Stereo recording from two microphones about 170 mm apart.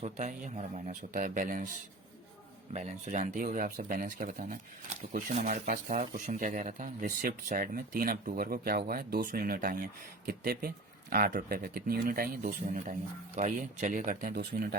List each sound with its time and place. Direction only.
0.0 s speech: 45° right (ahead or behind)
2.7 s speech: 40° right (ahead or behind); by 14.8 s 65° right (ahead or behind)